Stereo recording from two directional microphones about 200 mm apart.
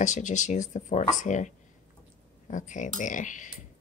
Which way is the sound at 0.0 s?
40° left (ahead or behind).